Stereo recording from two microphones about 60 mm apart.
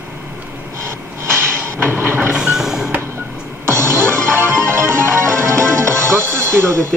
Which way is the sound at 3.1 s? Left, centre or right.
Right.